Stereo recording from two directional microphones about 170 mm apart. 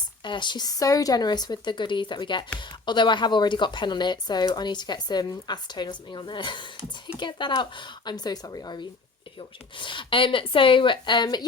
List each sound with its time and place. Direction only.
0.3 s speech: 25° left (ahead or behind)